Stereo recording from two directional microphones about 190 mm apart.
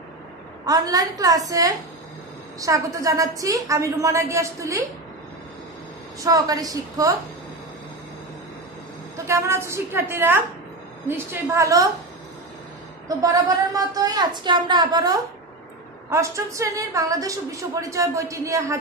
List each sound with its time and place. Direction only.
0.7 s a woman's voice: 20° right (ahead or behind)
6.2 s a woman's voice: 20° right (ahead or behind)
9.1 s a woman's voice: 15° right (ahead or behind)
13.1 s a woman's voice: 20° right (ahead or behind)